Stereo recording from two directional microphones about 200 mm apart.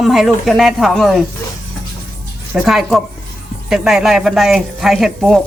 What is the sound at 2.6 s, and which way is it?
Speech, centre (ahead or behind).